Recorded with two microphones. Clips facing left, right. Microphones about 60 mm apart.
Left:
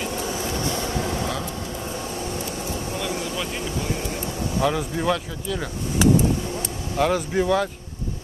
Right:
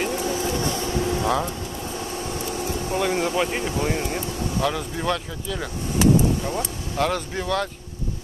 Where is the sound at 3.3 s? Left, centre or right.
Right.